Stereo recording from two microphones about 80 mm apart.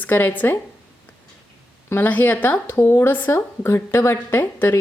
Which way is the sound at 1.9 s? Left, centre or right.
Left.